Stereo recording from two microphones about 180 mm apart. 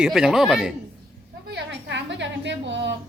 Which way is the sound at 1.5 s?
80° right.